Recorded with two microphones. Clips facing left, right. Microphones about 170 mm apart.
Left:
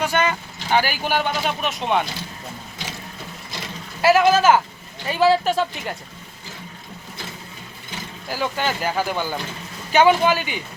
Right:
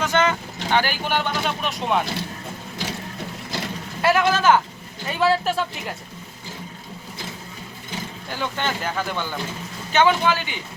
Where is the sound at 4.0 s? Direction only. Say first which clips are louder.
Left 4 dB; 5° left (ahead or behind).